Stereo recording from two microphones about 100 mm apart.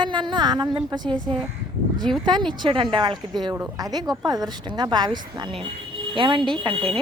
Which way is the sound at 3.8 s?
40° right (ahead or behind).